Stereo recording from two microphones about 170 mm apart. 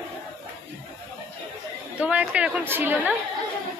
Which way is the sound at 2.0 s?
5° right (ahead or behind).